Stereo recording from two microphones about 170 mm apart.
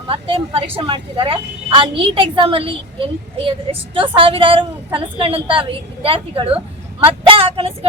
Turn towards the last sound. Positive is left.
turn(degrees=-35)  # may be behind; listen again after turning